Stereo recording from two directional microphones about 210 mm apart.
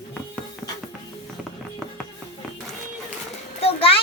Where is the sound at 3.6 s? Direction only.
25° left (ahead or behind).